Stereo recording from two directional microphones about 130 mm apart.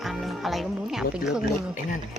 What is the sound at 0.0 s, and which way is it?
Speech, centre (ahead or behind).